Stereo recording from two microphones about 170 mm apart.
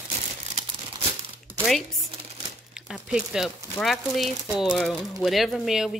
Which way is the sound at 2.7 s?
5° right (ahead or behind).